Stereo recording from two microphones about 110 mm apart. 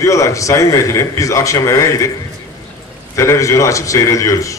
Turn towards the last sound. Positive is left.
turn(degrees=30)  # may be behind; listen again after turning